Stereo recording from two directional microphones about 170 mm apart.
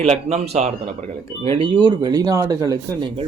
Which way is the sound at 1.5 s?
30° right (ahead or behind).